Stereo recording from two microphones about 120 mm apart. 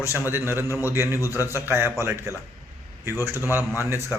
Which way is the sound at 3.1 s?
25° left (ahead or behind).